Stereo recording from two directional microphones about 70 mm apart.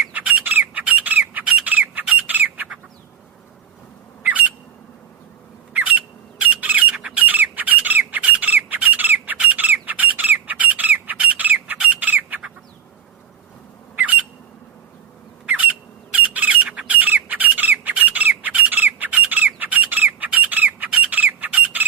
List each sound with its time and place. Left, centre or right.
0.1 s squawk: right
4.2 s a sound: right
5.7 s squawk: right
14.0 s squawk: right
15.4 s bird: right
16.1 s squawk: right